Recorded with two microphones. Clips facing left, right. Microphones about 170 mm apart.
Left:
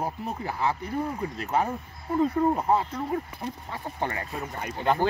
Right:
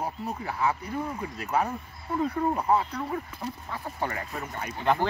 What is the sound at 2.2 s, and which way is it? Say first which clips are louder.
Speech: left 4 dB; 30° left (ahead or behind).